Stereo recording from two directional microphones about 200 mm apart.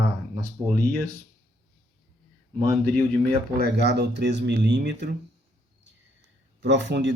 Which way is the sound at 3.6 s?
55° right (ahead or behind).